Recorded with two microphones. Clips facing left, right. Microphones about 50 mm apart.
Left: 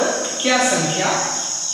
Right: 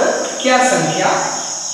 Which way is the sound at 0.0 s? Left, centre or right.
Centre.